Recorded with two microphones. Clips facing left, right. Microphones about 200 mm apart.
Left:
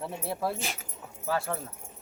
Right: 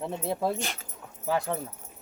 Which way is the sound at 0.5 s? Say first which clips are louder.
Right 2 dB; 5° left (ahead or behind).